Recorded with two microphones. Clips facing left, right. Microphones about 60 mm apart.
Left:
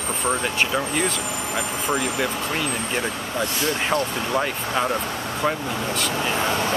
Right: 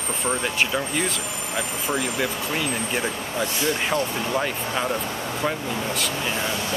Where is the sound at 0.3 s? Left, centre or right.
Centre.